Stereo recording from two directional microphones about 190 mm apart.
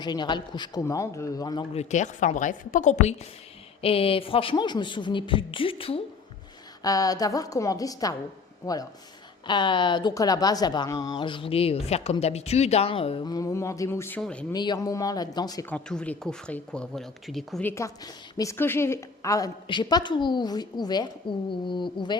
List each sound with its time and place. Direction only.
0.0 s speech: 25° left (ahead or behind)
1.7 s a woman's voice: 35° left (ahead or behind)
6.8 s speech: 20° left (ahead or behind)
14.5 s speech: 20° left (ahead or behind)
15.7 s speech: 5° left (ahead or behind); by 22.2 s 25° left (ahead or behind)